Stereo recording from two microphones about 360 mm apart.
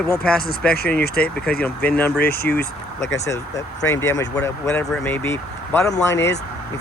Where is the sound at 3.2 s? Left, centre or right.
Centre.